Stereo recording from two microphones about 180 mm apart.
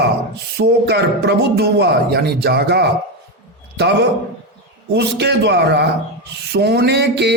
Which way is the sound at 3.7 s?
70° right (ahead or behind).